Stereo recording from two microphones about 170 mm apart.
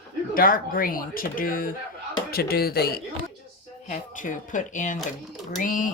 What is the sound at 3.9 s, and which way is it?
Speech, 50° left (ahead or behind).